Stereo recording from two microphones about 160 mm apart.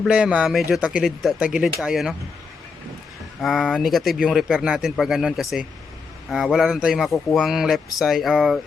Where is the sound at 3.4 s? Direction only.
Centre (ahead or behind).